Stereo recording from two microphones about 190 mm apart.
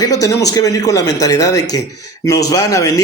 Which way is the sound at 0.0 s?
20° left (ahead or behind).